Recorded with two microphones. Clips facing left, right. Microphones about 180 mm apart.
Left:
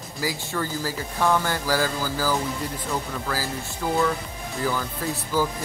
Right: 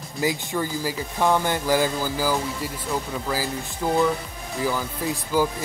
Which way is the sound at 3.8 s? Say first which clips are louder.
Right 2 dB; 15° right (ahead or behind).